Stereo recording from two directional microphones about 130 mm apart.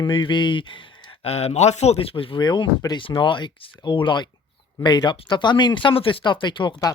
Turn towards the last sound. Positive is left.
turn(degrees=35)  # may be behind; listen again after turning